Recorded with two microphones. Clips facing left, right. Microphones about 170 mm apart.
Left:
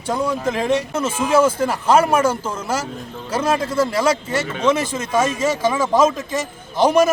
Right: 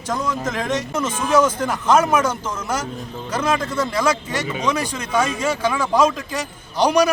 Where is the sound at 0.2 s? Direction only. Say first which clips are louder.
Left 3 dB; 30° left (ahead or behind).